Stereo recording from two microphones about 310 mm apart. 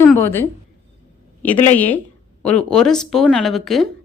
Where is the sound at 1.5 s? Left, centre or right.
Centre.